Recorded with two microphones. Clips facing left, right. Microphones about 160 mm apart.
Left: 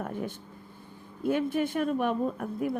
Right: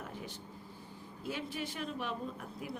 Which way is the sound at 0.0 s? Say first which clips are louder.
Left 11 dB; 55° left (ahead or behind).